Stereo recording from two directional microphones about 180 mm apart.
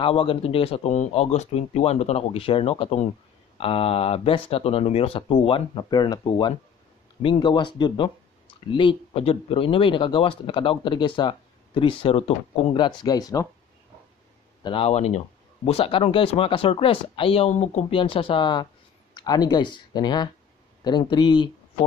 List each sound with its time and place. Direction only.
0.0 s speech: 30° left (ahead or behind)
14.6 s speech: 30° left (ahead or behind)